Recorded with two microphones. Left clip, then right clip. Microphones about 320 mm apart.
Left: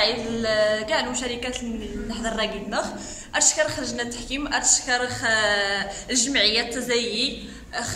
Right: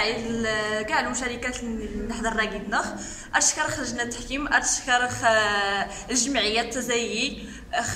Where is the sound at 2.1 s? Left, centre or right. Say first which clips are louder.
Even; centre.